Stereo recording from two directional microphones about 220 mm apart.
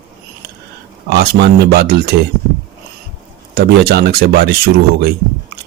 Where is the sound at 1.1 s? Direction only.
50° right (ahead or behind).